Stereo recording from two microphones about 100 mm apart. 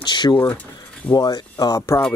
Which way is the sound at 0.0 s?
50° left (ahead or behind).